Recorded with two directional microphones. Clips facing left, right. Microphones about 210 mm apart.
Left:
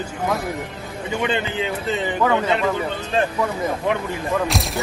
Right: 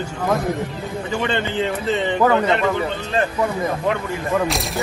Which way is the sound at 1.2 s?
10° left (ahead or behind).